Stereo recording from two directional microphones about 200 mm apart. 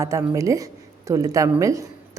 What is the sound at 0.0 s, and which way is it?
A woman's voice, 15° right (ahead or behind).